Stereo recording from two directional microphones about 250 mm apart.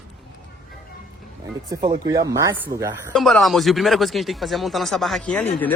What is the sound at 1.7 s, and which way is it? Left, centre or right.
Speech, centre.